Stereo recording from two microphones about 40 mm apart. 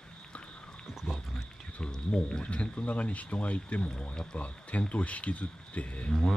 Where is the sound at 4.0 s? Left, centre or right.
Left.